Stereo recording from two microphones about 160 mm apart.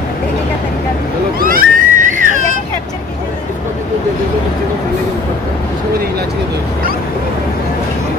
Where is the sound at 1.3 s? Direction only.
65° right (ahead or behind).